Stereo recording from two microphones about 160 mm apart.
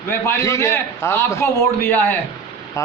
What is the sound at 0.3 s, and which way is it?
A man's voice, 20° left (ahead or behind).